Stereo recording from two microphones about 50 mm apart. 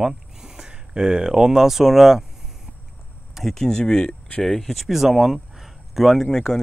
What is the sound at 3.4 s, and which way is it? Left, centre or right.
Speech, centre.